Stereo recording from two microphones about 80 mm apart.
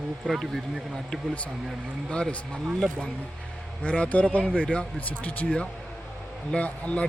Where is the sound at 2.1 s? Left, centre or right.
Centre.